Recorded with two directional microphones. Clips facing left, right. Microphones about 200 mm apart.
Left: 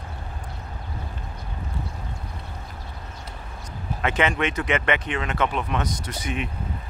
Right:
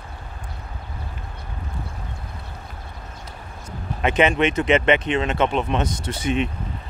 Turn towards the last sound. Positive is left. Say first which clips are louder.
# right 7 dB
turn(degrees=-25)  # may be behind; listen again after turning